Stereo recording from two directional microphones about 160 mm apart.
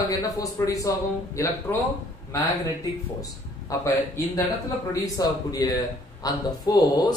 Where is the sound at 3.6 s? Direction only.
20° left (ahead or behind).